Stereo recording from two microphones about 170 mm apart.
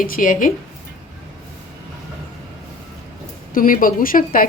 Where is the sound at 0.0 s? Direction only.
50° left (ahead or behind).